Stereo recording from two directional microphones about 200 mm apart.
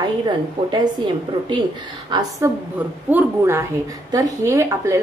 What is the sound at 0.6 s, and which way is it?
Speech, 25° right (ahead or behind).